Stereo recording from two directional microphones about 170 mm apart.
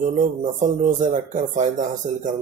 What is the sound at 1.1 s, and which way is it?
Speech, 45° right (ahead or behind).